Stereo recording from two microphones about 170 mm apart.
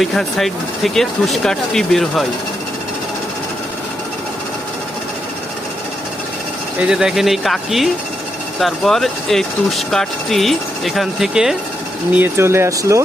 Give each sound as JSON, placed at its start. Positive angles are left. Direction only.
{"t": 0.0, "sound": "speech", "side_deg": 0}
{"t": 6.7, "sound": "speech", "side_deg": -5}
{"t": 12.1, "sound": "speech", "side_deg": -15}